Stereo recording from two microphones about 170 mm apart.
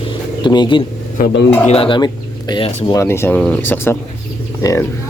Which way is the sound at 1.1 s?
65° left (ahead or behind).